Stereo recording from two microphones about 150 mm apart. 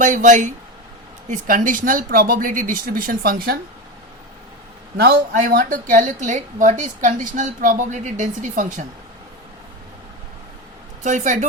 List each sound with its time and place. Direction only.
0.0 s a woman's voice: 55° right (ahead or behind); by 3.6 s 85° right
4.9 s a woman's voice: 90° right; by 8.8 s 55° right (ahead or behind)
11.0 s speech: 55° right (ahead or behind)